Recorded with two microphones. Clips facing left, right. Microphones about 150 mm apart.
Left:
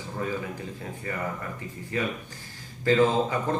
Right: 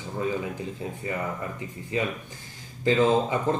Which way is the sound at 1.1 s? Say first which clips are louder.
Right 1 dB; 20° right (ahead or behind).